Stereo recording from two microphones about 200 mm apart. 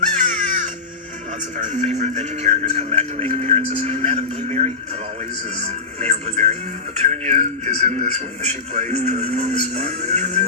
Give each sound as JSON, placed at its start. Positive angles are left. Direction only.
{"t": 0.2, "sound": "crow", "side_deg": -40}
{"t": 1.5, "sound": "speech", "side_deg": -40}